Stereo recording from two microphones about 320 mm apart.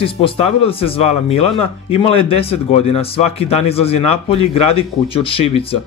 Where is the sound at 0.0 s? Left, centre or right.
Centre.